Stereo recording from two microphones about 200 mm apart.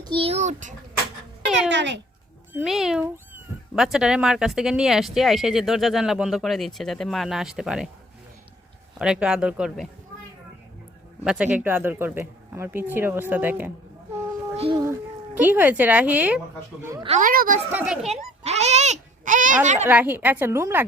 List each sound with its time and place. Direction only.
0.0 s a child's voice: 25° right (ahead or behind)
1.7 s a child's voice: 60° right (ahead or behind)
2.5 s speech: 5° right (ahead or behind)
9.0 s speech: 5° right (ahead or behind)
11.2 s speech: 5° right (ahead or behind)
14.5 s a sound: 30° right (ahead or behind)
15.4 s speech: 10° right (ahead or behind)
17.1 s a woman's voice: 40° right (ahead or behind)
17.7 s speech: 5° right (ahead or behind)
18.1 s a child's voice: 35° right (ahead or behind)
19.9 s speech: 10° right (ahead or behind)